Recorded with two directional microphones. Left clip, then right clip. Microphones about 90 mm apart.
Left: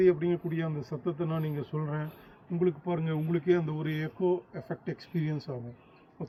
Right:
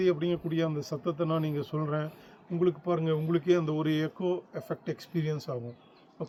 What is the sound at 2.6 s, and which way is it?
A man's voice, 55° right (ahead or behind).